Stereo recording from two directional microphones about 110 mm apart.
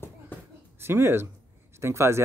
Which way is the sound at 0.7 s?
20° right (ahead or behind).